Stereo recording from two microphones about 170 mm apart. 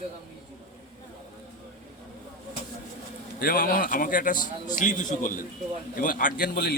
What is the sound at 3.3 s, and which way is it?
A man's voice, 60° left (ahead or behind).